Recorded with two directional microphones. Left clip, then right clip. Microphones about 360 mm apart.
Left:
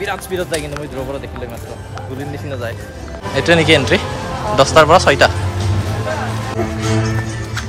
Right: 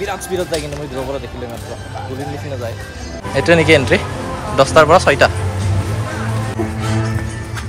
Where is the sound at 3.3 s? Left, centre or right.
Centre.